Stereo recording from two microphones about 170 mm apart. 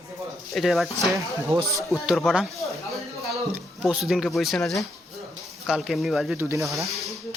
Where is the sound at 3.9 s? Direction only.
5° right (ahead or behind).